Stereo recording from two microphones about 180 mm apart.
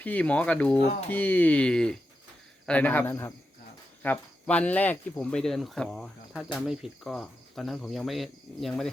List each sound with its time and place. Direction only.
0.0 s speech: 10° left (ahead or behind)